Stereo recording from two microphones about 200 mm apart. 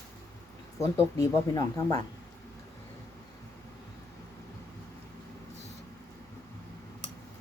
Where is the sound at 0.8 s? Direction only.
15° left (ahead or behind).